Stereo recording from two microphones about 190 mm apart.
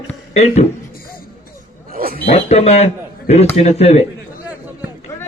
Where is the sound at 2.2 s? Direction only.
35° left (ahead or behind).